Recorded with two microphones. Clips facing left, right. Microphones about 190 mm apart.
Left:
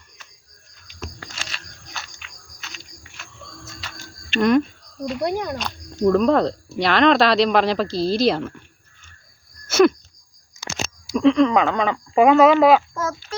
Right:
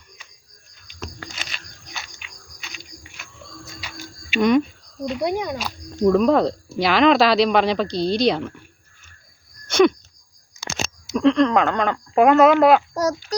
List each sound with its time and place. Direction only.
1.5 s a sound: centre (ahead or behind)
3.8 s music: 10° right (ahead or behind)
5.0 s speech: centre (ahead or behind)
9.6 s wheeze: 5° left (ahead or behind)
11.1 s speech: centre (ahead or behind)
12.9 s a child's voice: 40° right (ahead or behind)